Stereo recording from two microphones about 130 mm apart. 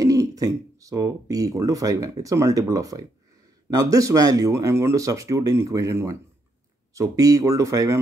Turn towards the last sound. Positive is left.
turn(degrees=-25)  # may be behind; listen again after turning